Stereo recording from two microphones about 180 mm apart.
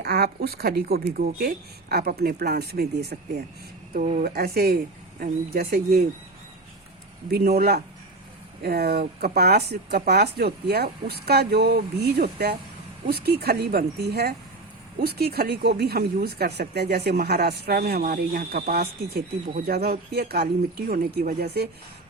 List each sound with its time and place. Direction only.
0.0 s speech: 65° right (ahead or behind)
3.9 s speech: 50° right (ahead or behind)
7.3 s speech: 60° right (ahead or behind)